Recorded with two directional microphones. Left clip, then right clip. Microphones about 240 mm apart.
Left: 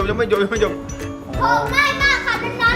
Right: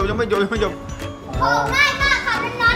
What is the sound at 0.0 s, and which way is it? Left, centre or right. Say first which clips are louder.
Music: left 1 dB; centre.